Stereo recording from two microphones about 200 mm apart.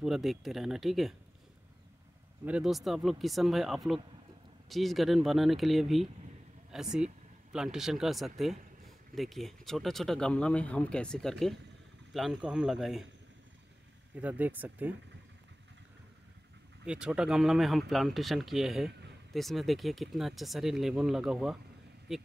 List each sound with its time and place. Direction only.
0.0 s speech: centre (ahead or behind)
2.4 s speech: 5° right (ahead or behind)
14.1 s speech: 5° right (ahead or behind)
16.8 s speech: 5° right (ahead or behind)